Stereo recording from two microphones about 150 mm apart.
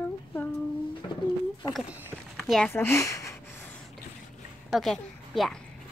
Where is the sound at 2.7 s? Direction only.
15° left (ahead or behind).